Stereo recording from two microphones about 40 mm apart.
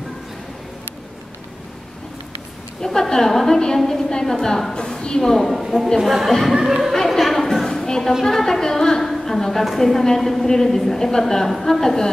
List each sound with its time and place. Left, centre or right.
2.8 s a woman's voice: centre
5.2 s a woman's voice: centre
7.1 s a sound: centre
8.1 s a woman's voice: centre